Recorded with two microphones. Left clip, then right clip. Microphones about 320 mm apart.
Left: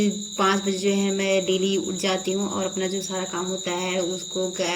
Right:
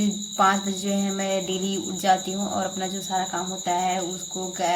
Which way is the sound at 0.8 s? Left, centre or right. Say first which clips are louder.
Left 5 dB; right.